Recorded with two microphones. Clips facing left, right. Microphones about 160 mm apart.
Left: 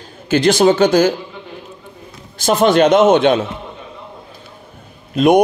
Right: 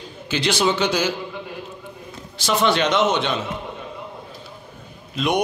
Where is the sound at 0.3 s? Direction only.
45° left (ahead or behind).